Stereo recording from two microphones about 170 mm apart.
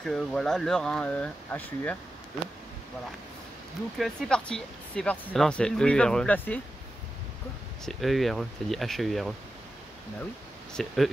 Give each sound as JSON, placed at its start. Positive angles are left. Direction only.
{"t": 0.0, "sound": "speech", "side_deg": 5}
{"t": 4.0, "sound": "speech", "side_deg": 5}
{"t": 7.8, "sound": "speech", "side_deg": 0}
{"t": 10.7, "sound": "speech", "side_deg": 5}